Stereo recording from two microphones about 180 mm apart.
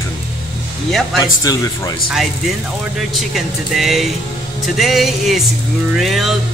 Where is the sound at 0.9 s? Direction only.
Centre (ahead or behind).